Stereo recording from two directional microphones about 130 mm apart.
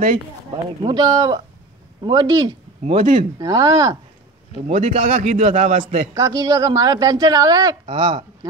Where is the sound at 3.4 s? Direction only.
25° right (ahead or behind).